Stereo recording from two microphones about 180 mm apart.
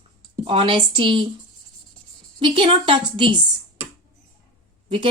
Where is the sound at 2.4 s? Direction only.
30° right (ahead or behind).